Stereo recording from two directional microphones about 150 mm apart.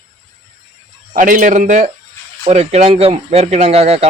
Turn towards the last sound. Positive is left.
turn(degrees=-45)  # may be behind; listen again after turning